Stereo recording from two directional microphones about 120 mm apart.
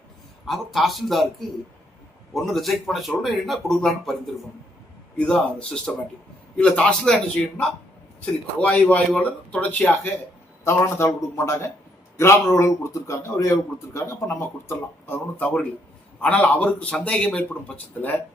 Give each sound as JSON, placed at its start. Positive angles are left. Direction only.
{"t": 0.4, "sound": "speech", "side_deg": 0}
{"t": 5.1, "sound": "a man's voice", "side_deg": 10}